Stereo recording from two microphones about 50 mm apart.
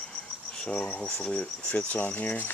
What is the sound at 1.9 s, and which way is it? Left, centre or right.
Speech, left.